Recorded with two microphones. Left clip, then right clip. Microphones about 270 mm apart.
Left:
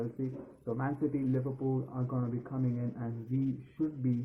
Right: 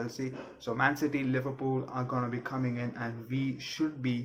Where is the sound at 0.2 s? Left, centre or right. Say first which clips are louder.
Right 2 dB; centre.